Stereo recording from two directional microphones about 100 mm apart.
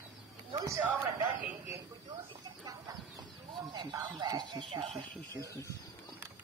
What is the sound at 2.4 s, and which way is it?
Chicken, 40° right (ahead or behind).